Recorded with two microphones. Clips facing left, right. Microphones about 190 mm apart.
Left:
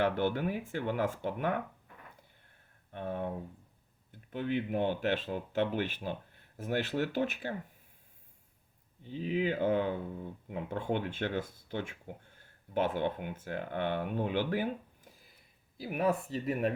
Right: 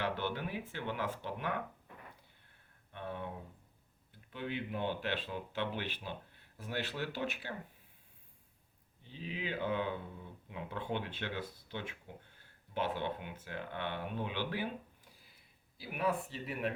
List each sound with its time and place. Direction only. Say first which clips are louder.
0.0 s speech: left 7 dB; 50° left (ahead or behind)
2.9 s speech: left 6 dB; 45° left (ahead or behind)
4.3 s speech: left 7 dB; 45° left (ahead or behind)
9.1 s speech: left 9 dB; 45° left (ahead or behind)